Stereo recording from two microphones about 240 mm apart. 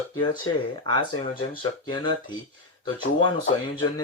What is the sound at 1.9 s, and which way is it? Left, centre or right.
Speech, centre.